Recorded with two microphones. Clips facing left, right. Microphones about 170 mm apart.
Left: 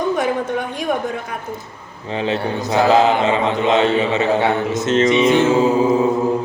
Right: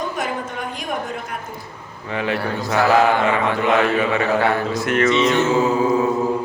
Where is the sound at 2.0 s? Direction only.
25° left (ahead or behind).